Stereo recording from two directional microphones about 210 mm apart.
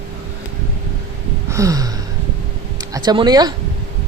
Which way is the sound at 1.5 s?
15° right (ahead or behind).